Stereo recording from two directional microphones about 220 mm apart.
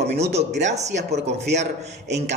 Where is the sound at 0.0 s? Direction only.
30° right (ahead or behind).